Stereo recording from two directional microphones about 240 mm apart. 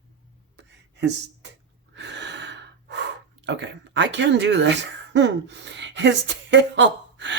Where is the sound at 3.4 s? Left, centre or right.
Right.